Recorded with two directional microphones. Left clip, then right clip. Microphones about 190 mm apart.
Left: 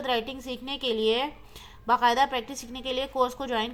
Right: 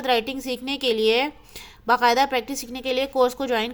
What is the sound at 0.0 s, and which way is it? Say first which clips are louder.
A woman's voice: right 6 dB; 30° right (ahead or behind).